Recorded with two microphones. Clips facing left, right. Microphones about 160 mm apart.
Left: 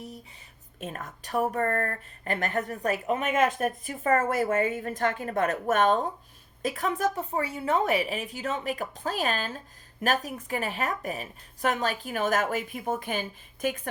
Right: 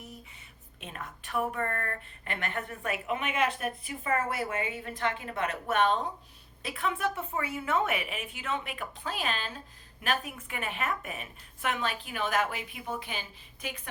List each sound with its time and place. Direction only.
0.8 s a woman's voice: 45° left (ahead or behind)